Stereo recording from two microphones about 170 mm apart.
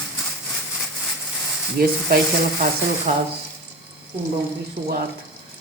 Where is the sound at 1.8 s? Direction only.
55° right (ahead or behind).